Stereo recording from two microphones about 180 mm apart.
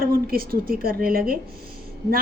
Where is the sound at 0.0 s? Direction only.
55° right (ahead or behind).